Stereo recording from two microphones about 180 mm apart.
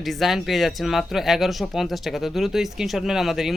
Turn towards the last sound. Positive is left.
turn(degrees=0)  # may be behind; listen again after turning